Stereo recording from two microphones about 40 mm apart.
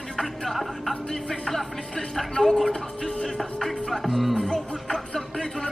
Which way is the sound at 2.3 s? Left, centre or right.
Centre.